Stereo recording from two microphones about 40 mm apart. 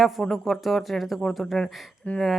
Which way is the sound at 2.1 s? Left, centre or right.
Left.